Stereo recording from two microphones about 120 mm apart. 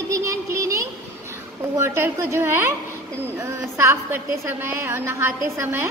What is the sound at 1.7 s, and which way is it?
Speech, 20° right (ahead or behind).